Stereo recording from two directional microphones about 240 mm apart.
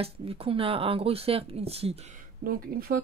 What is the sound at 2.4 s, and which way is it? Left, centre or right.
Speech, right.